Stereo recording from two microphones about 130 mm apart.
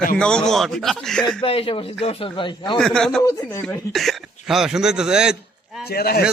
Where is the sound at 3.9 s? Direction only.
Centre (ahead or behind).